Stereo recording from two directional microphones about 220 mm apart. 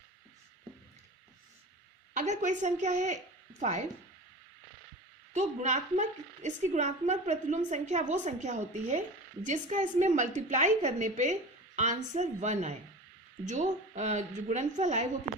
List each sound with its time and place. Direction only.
2.1 s a woman's voice: 35° right (ahead or behind)
5.3 s a woman's voice: 35° right (ahead or behind)